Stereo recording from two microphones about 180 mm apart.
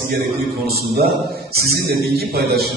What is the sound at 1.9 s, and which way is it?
Speech, 60° right (ahead or behind).